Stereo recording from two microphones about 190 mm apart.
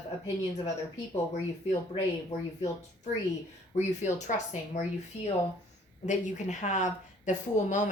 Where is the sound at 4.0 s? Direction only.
40° left (ahead or behind).